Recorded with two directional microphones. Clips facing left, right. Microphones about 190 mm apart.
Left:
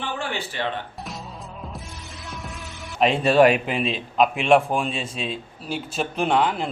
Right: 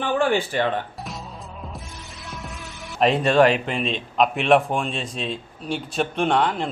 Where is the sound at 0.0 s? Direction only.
50° right (ahead or behind).